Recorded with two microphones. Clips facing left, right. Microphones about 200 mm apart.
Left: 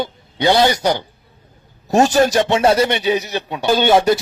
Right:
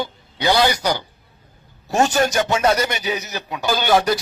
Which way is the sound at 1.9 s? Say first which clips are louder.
Left 5 dB; 35° left (ahead or behind).